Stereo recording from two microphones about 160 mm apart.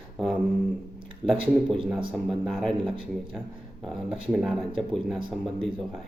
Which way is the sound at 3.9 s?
5° right (ahead or behind).